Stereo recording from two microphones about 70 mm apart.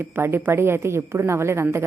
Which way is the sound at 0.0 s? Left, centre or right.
Right.